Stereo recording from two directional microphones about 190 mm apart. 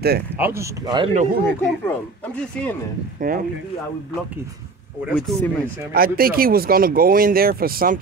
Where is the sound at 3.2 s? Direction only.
50° right (ahead or behind).